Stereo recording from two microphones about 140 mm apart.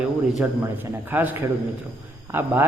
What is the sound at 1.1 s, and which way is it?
A man's voice, 15° right (ahead or behind).